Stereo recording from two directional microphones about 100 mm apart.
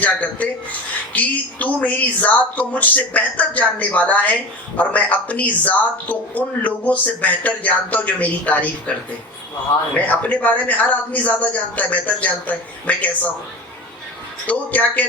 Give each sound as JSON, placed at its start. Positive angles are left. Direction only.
{"t": 0.0, "sound": "speech", "side_deg": 15}
{"t": 14.4, "sound": "speech", "side_deg": 15}